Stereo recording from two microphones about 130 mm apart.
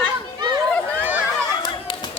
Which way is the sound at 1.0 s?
10° right (ahead or behind).